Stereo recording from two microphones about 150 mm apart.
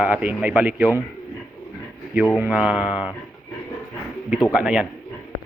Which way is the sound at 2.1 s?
Centre (ahead or behind).